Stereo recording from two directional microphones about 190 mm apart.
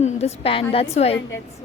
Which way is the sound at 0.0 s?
35° left (ahead or behind).